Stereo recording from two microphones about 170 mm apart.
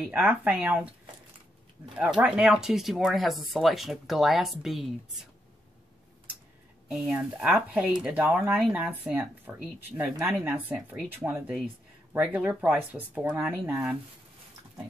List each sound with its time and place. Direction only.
0.0 s speech: 10° right (ahead or behind)
2.0 s speech: 5° right (ahead or behind)
6.9 s speech: 5° right (ahead or behind)